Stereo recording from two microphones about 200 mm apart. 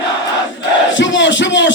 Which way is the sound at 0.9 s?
65° left (ahead or behind).